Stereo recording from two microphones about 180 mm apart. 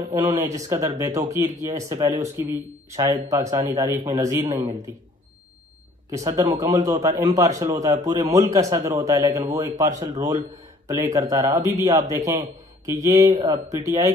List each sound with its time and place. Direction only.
0.1 s a man's voice: 20° right (ahead or behind)
6.0 s a man's voice: 20° right (ahead or behind)